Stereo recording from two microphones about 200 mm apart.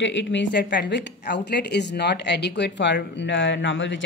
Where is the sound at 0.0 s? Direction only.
65° left (ahead or behind).